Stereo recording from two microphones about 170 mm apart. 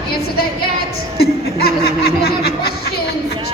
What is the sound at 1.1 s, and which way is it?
Speech, 65° left (ahead or behind).